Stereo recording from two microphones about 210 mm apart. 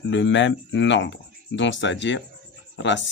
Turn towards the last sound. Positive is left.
turn(degrees=60)  # may be behind; listen again after turning